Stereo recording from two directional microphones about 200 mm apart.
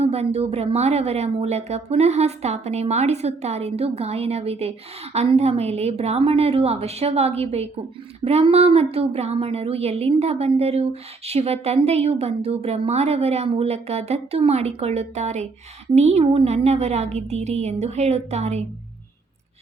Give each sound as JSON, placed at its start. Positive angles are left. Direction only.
{"t": 0.0, "sound": "a woman's voice", "side_deg": -30}